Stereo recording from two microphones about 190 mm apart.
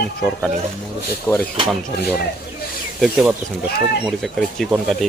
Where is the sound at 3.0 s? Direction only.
Centre (ahead or behind).